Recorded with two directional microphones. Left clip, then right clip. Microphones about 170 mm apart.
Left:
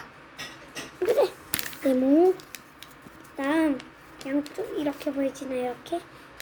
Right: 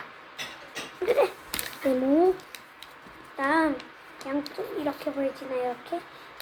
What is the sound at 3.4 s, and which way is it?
Speech, 20° left (ahead or behind).